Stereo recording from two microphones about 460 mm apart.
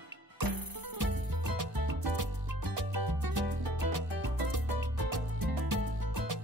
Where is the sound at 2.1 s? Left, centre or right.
Right.